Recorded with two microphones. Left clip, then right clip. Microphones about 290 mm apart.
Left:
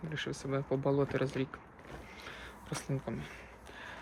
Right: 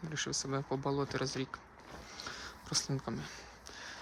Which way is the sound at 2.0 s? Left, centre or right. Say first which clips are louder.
Right 5 dB; centre.